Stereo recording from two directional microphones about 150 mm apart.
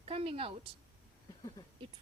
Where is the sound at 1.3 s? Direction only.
25° left (ahead or behind).